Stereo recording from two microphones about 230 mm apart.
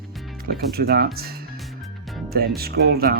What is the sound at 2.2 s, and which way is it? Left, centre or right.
Speech, right.